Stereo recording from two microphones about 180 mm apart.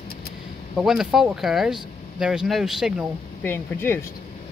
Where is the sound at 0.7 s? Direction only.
Centre (ahead or behind).